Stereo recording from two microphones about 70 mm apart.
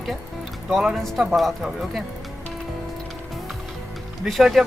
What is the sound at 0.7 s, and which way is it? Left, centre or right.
Speech, centre.